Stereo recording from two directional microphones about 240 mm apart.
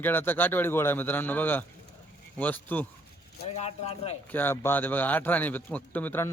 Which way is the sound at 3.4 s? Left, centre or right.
Left.